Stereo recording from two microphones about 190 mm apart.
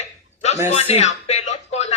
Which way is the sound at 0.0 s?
35° left (ahead or behind).